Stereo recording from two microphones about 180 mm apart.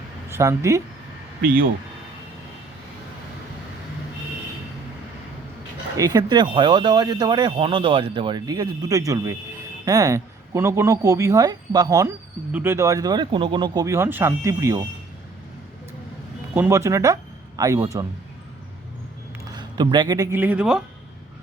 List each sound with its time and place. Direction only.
0.3 s speech: 15° right (ahead or behind)
6.0 s speech: 20° right (ahead or behind)
16.6 s speech: 15° right (ahead or behind)
19.5 s speech: 25° right (ahead or behind); by 20.8 s 5° right (ahead or behind)